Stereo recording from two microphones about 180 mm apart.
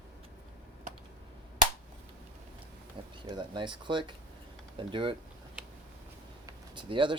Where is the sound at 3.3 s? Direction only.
25° right (ahead or behind).